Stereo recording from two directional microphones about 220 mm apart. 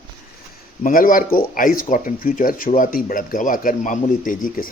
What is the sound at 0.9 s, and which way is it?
Speech, 40° left (ahead or behind).